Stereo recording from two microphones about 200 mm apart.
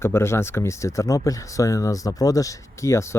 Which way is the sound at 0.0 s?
15° left (ahead or behind).